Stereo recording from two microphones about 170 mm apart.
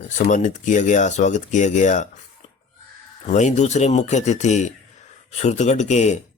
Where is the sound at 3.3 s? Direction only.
45° left (ahead or behind).